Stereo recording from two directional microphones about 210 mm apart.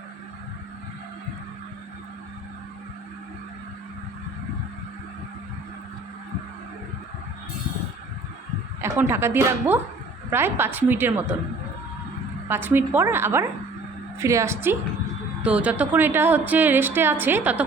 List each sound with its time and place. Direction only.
8.8 s a woman's voice: 10° right (ahead or behind)
12.5 s a woman's voice: 10° right (ahead or behind)